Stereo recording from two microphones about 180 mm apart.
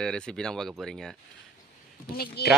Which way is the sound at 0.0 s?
5° left (ahead or behind).